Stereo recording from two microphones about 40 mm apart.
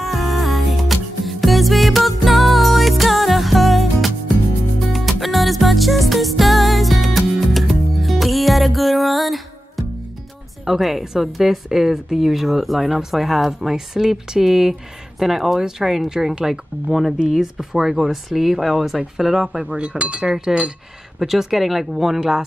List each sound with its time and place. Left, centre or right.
0.1 s music: centre
10.6 s a woman's voice: centre
19.8 s speech: right
20.2 s a woman's voice: centre